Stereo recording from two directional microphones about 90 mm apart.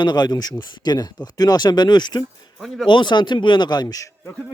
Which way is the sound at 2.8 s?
60° left (ahead or behind).